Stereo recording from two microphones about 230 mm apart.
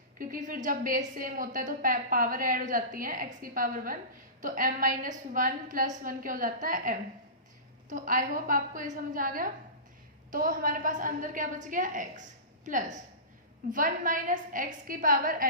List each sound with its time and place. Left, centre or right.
0.2 s a woman's voice: right